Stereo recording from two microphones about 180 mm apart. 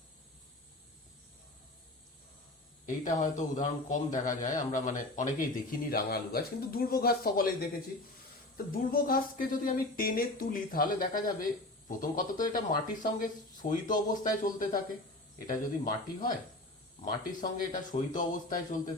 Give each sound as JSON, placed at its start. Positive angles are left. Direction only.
{"t": 2.8, "sound": "a man's voice", "side_deg": 45}